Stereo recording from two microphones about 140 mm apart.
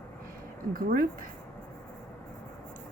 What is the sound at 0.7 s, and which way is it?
Speech, 90° right.